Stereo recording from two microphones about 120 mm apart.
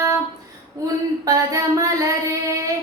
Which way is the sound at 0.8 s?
25° right (ahead or behind).